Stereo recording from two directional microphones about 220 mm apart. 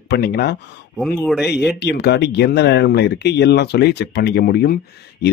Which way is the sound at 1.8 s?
50° left (ahead or behind).